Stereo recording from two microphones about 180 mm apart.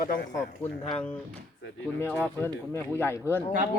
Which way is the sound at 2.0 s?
15° left (ahead or behind).